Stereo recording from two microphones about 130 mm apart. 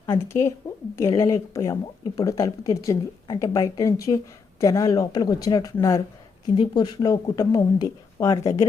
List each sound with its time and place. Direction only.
0.0 s speech: 20° left (ahead or behind)